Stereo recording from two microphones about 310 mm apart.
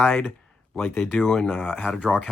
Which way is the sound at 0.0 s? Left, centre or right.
Centre.